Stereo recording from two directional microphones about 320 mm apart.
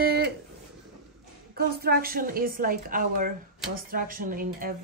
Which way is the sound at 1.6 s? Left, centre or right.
Right.